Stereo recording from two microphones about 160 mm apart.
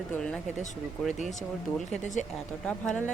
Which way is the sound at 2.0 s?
50° left (ahead or behind).